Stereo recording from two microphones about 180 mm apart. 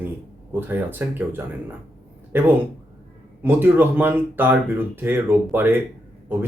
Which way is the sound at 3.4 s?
10° right (ahead or behind).